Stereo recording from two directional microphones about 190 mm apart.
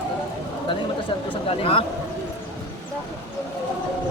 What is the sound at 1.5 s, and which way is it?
Speech, 30° left (ahead or behind).